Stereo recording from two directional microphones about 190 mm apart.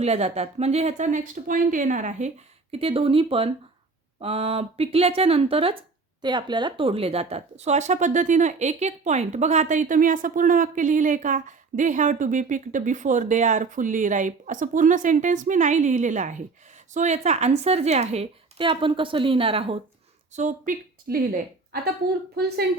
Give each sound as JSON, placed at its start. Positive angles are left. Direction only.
{"t": 0.0, "sound": "a woman's voice", "side_deg": -35}
{"t": 20.3, "sound": "a woman's voice", "side_deg": -45}